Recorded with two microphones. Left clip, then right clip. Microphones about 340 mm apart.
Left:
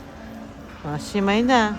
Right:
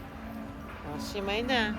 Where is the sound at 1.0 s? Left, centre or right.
Left.